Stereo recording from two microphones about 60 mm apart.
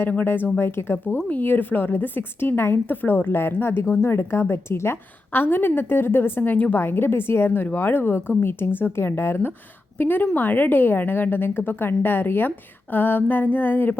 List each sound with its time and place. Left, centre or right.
0.0 s a woman's voice: left